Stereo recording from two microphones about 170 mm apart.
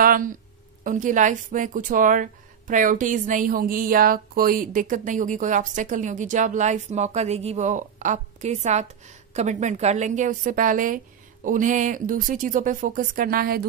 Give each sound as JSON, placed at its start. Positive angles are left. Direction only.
{"t": 0.0, "sound": "a woman's voice", "side_deg": -55}